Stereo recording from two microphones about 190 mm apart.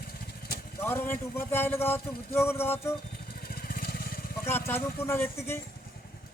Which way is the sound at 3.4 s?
50° left (ahead or behind).